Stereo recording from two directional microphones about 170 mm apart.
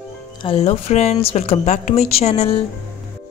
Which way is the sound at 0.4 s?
35° left (ahead or behind).